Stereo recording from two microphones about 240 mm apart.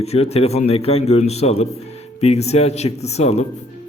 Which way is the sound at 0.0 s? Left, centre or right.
Left.